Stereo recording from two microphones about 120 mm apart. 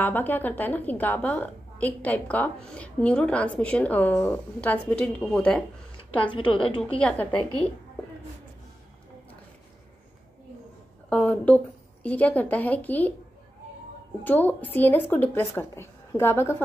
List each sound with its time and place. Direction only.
0.0 s a woman's voice: 15° left (ahead or behind)
6.3 s a woman's voice: 45° left (ahead or behind)
7.0 s a woman's voice: 10° left (ahead or behind)
11.1 s speech: 10° left (ahead or behind)
14.2 s a woman's voice: 15° left (ahead or behind)